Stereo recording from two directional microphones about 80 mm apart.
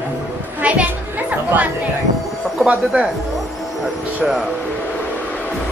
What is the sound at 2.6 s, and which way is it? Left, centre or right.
Speech, centre.